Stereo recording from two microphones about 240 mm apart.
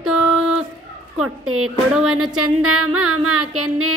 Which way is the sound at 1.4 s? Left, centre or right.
Right.